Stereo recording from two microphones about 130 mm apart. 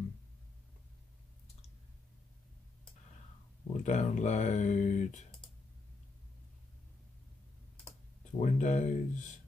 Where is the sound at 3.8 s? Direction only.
65° left (ahead or behind).